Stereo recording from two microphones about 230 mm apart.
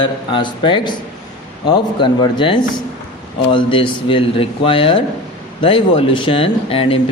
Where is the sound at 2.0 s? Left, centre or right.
Left.